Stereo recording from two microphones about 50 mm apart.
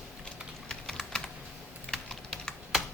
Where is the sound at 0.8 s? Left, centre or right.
Centre.